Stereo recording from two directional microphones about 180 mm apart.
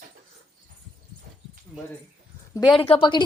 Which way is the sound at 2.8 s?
30° left (ahead or behind).